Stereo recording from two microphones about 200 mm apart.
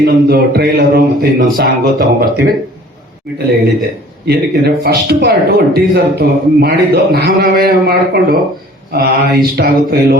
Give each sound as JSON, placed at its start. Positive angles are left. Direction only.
{"t": 0.0, "sound": "a woman's voice", "side_deg": -55}
{"t": 4.3, "sound": "a woman's voice", "side_deg": -55}